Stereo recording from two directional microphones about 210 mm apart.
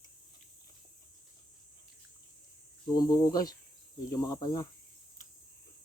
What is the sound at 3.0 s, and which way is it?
Speech, 20° left (ahead or behind).